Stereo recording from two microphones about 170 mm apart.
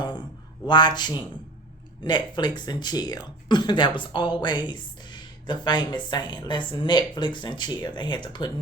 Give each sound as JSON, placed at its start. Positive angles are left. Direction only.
{"t": 0.7, "sound": "speech", "side_deg": 25}